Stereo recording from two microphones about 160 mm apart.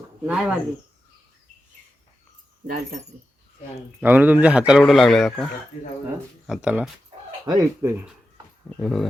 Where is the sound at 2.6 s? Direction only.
60° right (ahead or behind).